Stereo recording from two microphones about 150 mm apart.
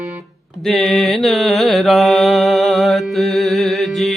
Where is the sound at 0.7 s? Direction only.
Centre (ahead or behind).